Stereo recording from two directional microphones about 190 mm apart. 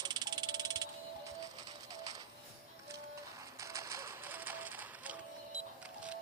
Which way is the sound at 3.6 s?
15° right (ahead or behind).